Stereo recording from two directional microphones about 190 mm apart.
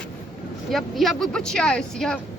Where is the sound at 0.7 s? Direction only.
Centre (ahead or behind).